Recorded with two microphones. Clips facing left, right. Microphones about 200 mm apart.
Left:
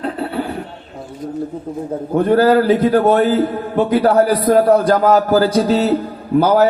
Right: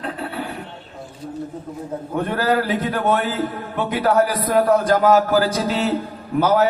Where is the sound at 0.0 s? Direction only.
35° left (ahead or behind).